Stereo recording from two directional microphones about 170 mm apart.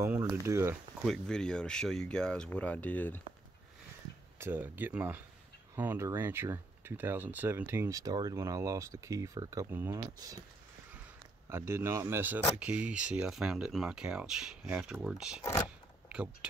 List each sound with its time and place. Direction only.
0.0 s speech: 15° right (ahead or behind)
1.0 s speech: 5° left (ahead or behind)
4.4 s speech: 10° right (ahead or behind)
11.4 s speech: 15° right (ahead or behind)